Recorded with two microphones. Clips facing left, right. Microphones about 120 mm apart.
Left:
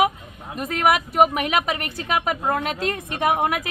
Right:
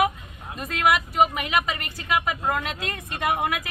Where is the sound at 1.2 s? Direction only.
55° left (ahead or behind).